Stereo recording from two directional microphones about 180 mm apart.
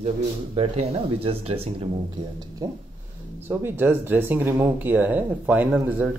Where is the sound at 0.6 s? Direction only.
35° right (ahead or behind).